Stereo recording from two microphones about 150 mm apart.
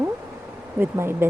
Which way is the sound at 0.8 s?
15° right (ahead or behind).